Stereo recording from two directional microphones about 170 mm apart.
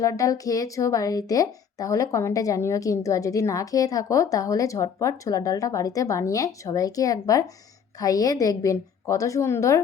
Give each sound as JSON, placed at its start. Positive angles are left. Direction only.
{"t": 0.0, "sound": "a woman's voice", "side_deg": 20}